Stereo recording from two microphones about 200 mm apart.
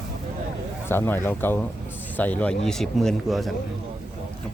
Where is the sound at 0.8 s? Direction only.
10° left (ahead or behind).